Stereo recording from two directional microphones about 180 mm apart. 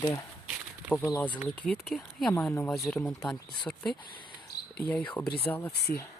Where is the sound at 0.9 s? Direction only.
5° left (ahead or behind).